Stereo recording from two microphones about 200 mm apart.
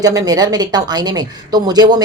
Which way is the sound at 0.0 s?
20° right (ahead or behind).